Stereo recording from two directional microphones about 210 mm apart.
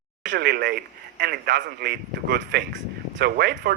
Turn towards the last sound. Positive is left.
turn(degrees=-45)  # may be behind; listen again after turning